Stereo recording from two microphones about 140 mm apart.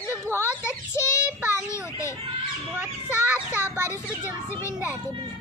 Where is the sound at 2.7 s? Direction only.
10° right (ahead or behind).